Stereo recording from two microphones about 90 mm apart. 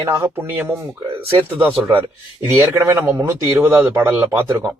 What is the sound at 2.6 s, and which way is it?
Speech, 35° right (ahead or behind).